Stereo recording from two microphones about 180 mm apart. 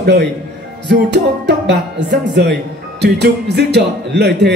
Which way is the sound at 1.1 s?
70° right (ahead or behind).